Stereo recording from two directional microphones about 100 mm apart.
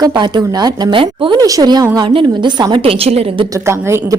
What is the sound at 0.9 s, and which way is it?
Speech, 60° right (ahead or behind).